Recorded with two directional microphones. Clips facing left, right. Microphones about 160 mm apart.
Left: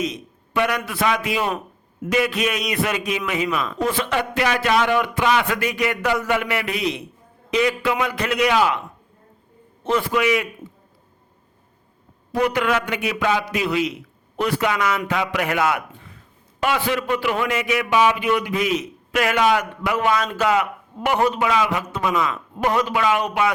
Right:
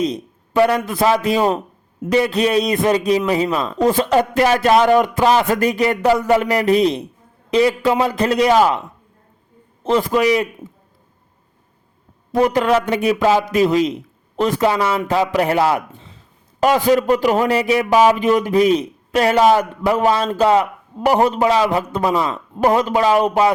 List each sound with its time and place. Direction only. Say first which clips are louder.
0.0 s a man's voice: right 6 dB; 35° right (ahead or behind)
9.8 s a man's voice: right 4 dB; 35° right (ahead or behind)
12.3 s a man's voice: right 5 dB; 40° right (ahead or behind); by 16.2 s 25° right (ahead or behind)
16.6 s a man's voice: right 8 dB; 40° right (ahead or behind)